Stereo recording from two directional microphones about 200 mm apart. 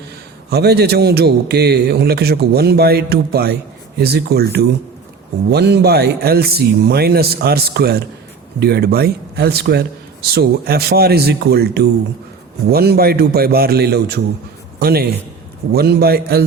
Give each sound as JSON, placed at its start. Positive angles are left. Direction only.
{"t": 0.5, "sound": "a man's voice", "side_deg": -55}